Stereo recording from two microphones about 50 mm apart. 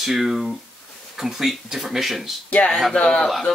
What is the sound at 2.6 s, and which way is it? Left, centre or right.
Speech, left.